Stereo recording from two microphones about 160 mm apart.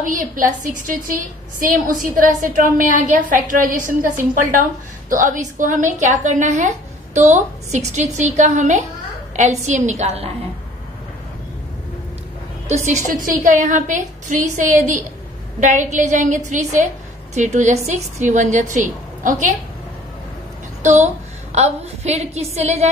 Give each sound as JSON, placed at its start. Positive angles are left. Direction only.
{"t": 0.0, "sound": "a woman's voice", "side_deg": -55}
{"t": 12.6, "sound": "a woman's voice", "side_deg": -45}
{"t": 20.8, "sound": "a woman's voice", "side_deg": -45}